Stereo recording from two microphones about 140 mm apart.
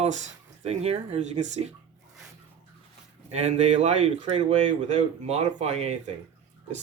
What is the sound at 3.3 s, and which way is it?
Speech, 50° right (ahead or behind).